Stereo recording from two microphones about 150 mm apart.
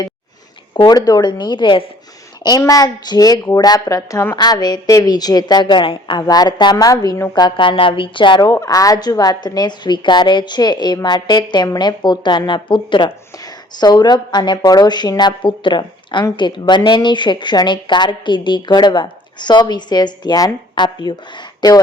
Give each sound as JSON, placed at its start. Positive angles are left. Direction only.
{"t": 0.7, "sound": "a woman's voice", "side_deg": 30}